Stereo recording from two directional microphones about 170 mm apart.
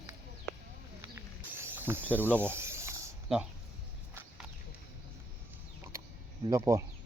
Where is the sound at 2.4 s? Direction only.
15° right (ahead or behind).